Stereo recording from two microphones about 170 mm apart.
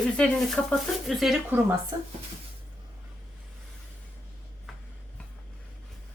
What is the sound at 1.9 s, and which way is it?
Speech, 20° right (ahead or behind).